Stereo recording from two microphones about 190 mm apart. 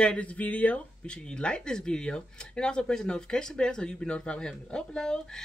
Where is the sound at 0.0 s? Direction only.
5° left (ahead or behind).